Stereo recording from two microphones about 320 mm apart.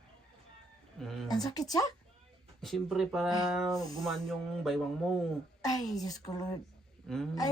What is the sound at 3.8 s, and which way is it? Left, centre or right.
Speech, centre.